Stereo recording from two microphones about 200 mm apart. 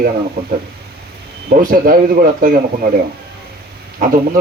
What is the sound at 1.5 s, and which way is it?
Speech, 45° right (ahead or behind).